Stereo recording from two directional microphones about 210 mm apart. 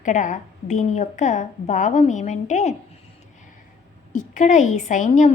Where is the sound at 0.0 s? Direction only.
35° left (ahead or behind).